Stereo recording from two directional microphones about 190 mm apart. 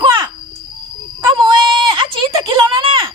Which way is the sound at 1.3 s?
25° right (ahead or behind).